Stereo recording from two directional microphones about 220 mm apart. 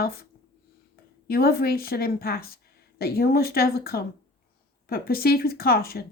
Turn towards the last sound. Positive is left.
turn(degrees=45)  # may be behind; listen again after turning